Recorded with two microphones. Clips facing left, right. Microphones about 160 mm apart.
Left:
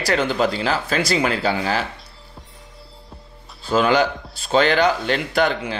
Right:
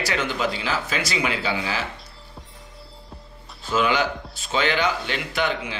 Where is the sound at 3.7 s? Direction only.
40° left (ahead or behind).